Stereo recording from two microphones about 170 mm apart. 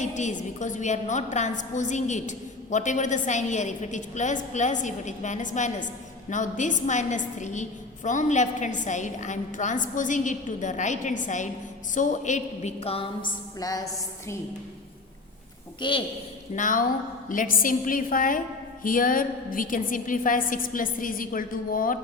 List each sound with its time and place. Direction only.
0.0 s a woman's voice: 45° left (ahead or behind); by 13.8 s 20° left (ahead or behind)
15.8 s a woman's voice: 30° left (ahead or behind)
16.6 s a woman's voice: 50° left (ahead or behind)